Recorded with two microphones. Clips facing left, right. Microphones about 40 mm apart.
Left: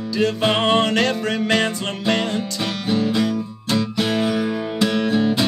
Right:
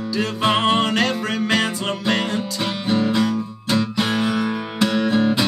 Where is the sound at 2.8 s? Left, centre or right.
Centre.